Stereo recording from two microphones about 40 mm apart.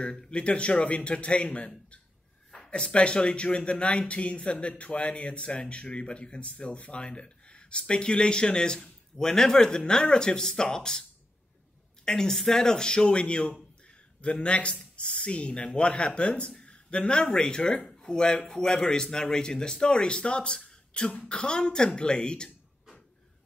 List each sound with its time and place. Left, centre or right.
0.0 s speech: left
2.7 s speech: left